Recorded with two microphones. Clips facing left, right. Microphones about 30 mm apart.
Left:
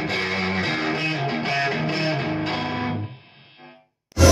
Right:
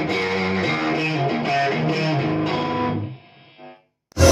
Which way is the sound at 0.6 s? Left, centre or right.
Centre.